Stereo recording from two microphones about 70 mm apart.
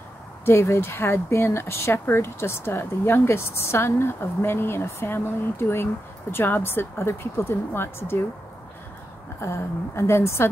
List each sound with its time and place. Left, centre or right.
0.5 s speech: left
9.4 s speech: left